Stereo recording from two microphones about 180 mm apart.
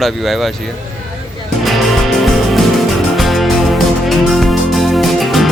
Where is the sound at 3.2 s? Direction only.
Centre (ahead or behind).